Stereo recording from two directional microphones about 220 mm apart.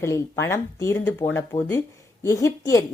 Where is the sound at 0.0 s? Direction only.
10° left (ahead or behind).